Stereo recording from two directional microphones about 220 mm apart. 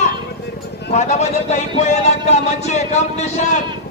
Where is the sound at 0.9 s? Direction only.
30° left (ahead or behind).